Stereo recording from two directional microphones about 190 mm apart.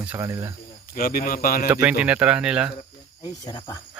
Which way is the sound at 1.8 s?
5° right (ahead or behind).